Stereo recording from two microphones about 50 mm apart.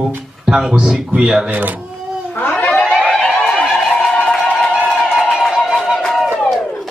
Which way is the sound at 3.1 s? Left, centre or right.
Centre.